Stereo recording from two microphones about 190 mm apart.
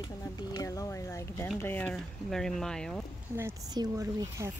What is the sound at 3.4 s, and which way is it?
Speech, 15° right (ahead or behind).